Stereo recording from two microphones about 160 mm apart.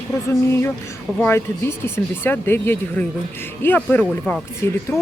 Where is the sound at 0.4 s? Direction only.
15° left (ahead or behind).